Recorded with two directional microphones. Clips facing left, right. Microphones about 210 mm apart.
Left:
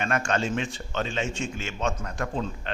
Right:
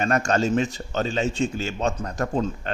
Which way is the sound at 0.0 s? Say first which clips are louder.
Right 5 dB; 40° right (ahead or behind).